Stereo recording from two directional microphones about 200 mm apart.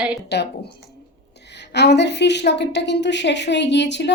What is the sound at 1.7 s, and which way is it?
Speech, 60° left (ahead or behind).